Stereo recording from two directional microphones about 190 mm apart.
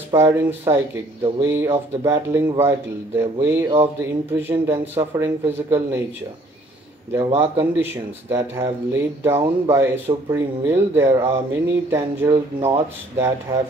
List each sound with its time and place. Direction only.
0.1 s speech: 15° right (ahead or behind)
7.3 s speech: 10° right (ahead or behind)